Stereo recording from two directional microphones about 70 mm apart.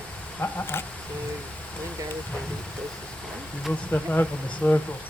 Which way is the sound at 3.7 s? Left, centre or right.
Left.